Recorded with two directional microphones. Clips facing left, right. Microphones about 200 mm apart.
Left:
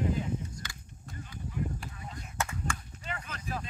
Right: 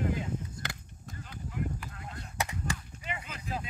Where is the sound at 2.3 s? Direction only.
15° right (ahead or behind).